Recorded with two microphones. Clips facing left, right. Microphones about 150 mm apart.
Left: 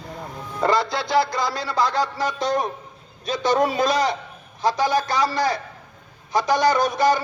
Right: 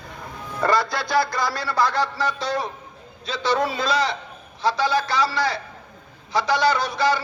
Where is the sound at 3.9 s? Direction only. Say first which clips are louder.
Left 2 dB; 45° left (ahead or behind).